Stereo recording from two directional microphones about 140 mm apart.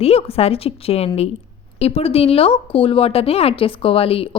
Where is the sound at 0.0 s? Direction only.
45° left (ahead or behind).